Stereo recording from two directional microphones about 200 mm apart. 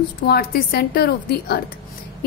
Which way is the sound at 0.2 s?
45° left (ahead or behind).